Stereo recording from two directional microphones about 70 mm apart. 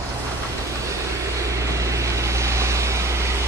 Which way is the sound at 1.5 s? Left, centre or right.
Right.